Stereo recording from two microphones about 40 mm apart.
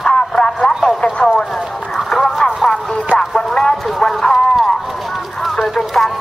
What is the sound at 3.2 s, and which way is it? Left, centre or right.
Music, centre.